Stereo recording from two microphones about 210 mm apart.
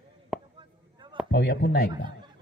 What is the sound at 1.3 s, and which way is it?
Speech, 50° left (ahead or behind).